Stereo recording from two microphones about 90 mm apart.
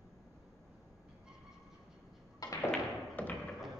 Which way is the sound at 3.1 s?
20° left (ahead or behind).